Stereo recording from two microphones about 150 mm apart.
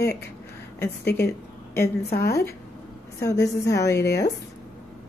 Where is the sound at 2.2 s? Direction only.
20° left (ahead or behind).